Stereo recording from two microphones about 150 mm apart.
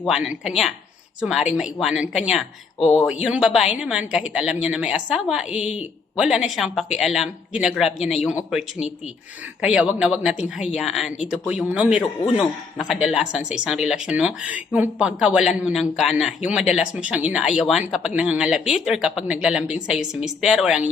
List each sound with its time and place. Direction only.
0.1 s a man's voice: 5° right (ahead or behind)
5.5 s a woman's voice: 45° left (ahead or behind)
6.1 s a woman's voice: 5° right (ahead or behind)
9.6 s a woman's voice: 5° right (ahead or behind)